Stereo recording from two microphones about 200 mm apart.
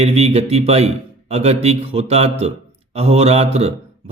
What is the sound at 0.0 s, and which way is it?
Speech, 30° right (ahead or behind).